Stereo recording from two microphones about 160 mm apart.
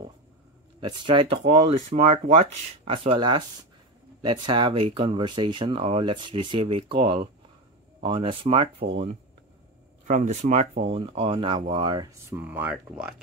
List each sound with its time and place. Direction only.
0.7 s speech: 30° right (ahead or behind)
10.0 s speech: 50° right (ahead or behind); by 13.1 s 10° right (ahead or behind)